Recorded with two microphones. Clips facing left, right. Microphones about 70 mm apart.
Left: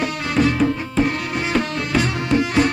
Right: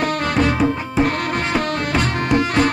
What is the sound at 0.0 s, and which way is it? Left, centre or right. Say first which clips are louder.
Music: right 1 dB; right.